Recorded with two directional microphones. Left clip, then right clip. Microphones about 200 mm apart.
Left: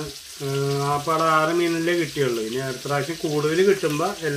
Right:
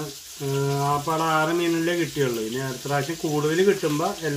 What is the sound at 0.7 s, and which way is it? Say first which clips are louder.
Speech: left 2 dB; 20° right (ahead or behind).